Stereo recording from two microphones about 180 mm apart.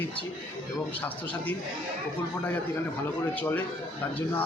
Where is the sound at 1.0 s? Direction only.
10° left (ahead or behind).